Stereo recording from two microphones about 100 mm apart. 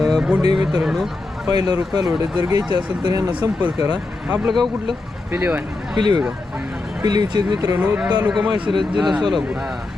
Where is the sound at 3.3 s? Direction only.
15° right (ahead or behind).